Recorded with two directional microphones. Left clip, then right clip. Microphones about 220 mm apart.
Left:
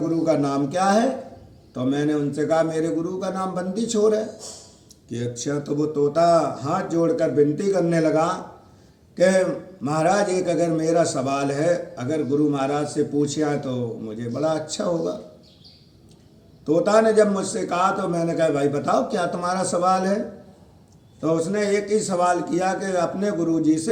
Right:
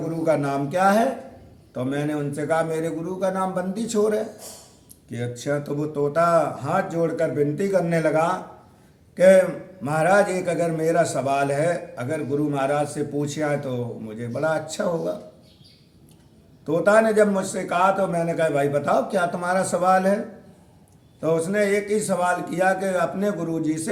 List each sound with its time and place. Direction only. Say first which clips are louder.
0.3 s a man's voice: right 3 dB; 20° right (ahead or behind)
16.6 s a man's voice: even; 20° right (ahead or behind)